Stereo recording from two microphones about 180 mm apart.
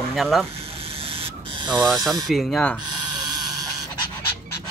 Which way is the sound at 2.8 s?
25° right (ahead or behind).